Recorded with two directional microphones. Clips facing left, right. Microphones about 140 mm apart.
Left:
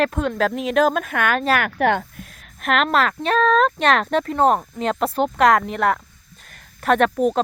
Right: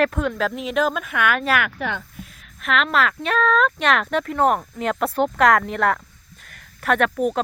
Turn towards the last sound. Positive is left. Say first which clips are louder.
# left 3 dB
turn(degrees=25)  # may be behind; listen again after turning